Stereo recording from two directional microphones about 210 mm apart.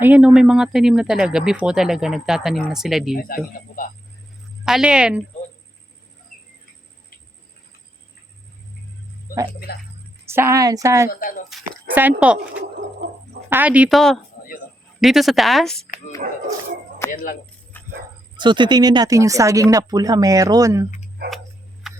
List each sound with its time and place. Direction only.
0.0 s speech: 5° right (ahead or behind)
3.2 s a man's voice: 40° left (ahead or behind)
4.6 s speech: 5° right (ahead or behind)
9.3 s a man's voice: 40° left (ahead or behind)
10.2 s speech: 10° right (ahead or behind)
11.1 s speech: 40° left (ahead or behind)
12.2 s speech: 5° right (ahead or behind)
13.5 s speech: 5° right (ahead or behind)
17.0 s speech: 10° left (ahead or behind)
17.7 s dog: 10° left (ahead or behind)
18.3 s speech: 20° right (ahead or behind)